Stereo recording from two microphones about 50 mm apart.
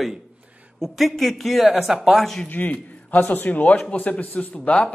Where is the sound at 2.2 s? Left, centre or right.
Centre.